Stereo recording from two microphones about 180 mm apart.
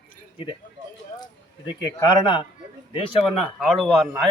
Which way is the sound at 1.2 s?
20° left (ahead or behind).